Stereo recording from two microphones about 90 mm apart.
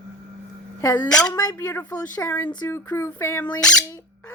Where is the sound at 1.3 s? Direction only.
35° left (ahead or behind).